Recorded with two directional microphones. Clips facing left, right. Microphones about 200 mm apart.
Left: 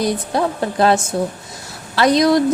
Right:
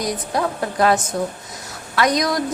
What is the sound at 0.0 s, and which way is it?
Speech, 30° left (ahead or behind).